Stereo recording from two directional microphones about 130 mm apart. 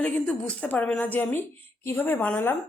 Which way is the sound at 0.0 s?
10° left (ahead or behind).